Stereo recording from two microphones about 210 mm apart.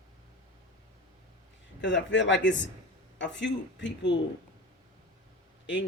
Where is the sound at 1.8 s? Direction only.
60° left (ahead or behind).